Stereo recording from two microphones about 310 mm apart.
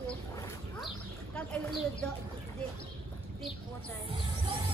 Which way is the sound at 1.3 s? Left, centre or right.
Centre.